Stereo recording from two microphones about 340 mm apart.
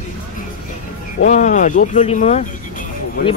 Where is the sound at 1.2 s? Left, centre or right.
Left.